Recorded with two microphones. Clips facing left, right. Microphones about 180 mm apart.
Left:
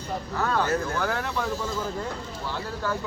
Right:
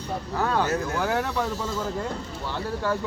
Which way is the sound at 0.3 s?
25° right (ahead or behind).